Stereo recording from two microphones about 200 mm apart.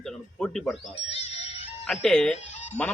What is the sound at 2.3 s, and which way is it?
Music, 35° left (ahead or behind).